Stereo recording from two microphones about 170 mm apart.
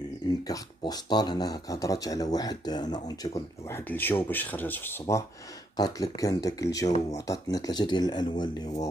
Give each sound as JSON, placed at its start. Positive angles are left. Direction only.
{"t": 0.5, "sound": "speech", "side_deg": 25}